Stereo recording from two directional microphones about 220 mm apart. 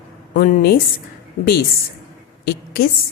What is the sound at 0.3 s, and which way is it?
Speech, 45° left (ahead or behind).